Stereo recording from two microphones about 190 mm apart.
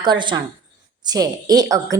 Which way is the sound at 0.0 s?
25° right (ahead or behind).